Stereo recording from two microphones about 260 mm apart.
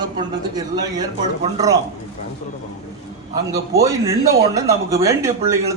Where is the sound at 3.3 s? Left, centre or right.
Centre.